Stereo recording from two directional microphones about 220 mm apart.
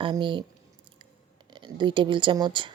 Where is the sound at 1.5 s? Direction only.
20° right (ahead or behind).